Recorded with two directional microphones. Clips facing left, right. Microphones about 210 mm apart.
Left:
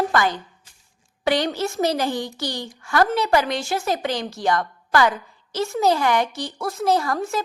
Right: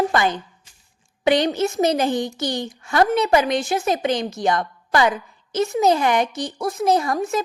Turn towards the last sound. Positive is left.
turn(degrees=-20)  # may be behind; listen again after turning